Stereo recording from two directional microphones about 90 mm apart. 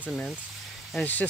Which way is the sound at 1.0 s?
20° left (ahead or behind).